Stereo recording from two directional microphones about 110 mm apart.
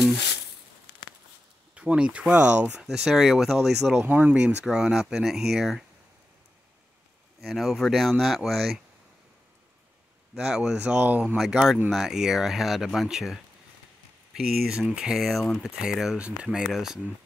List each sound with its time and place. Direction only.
1.8 s speech: 10° right (ahead or behind)
4.0 s speech: 15° right (ahead or behind)
7.4 s speech: centre (ahead or behind)
10.3 s speech: 5° right (ahead or behind)
11.3 s speech: centre (ahead or behind)